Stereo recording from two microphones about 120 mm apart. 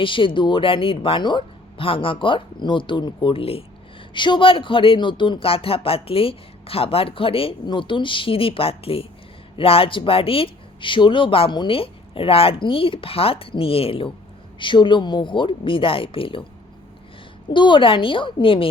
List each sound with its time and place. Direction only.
0.0 s speech: 45° left (ahead or behind)
17.5 s speech: 40° left (ahead or behind)